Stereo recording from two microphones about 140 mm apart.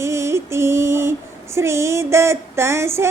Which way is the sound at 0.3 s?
20° right (ahead or behind).